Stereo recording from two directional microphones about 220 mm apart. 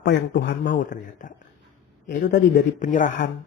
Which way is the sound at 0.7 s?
35° left (ahead or behind).